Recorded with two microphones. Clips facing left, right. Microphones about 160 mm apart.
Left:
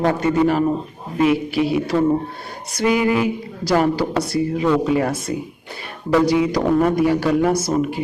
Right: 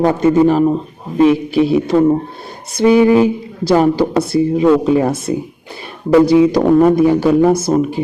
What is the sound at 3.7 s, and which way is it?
A woman's voice, 25° right (ahead or behind).